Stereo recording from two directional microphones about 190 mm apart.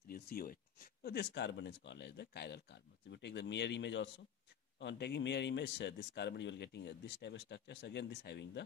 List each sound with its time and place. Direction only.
0.1 s speech: 50° left (ahead or behind)
1.0 s a man's voice: 60° left (ahead or behind)